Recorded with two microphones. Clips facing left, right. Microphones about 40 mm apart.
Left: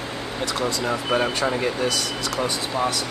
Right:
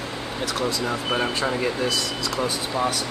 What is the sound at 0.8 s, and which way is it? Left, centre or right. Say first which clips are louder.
Speech: left 2 dB; centre.